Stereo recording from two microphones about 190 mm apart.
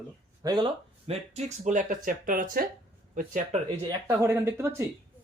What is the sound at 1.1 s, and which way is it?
Speech, 35° right (ahead or behind).